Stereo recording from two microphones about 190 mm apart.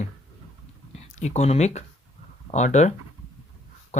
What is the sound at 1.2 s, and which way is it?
Speech, 35° left (ahead or behind).